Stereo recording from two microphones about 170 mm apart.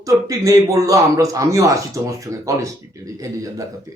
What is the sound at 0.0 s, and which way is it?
A man's voice, 20° right (ahead or behind).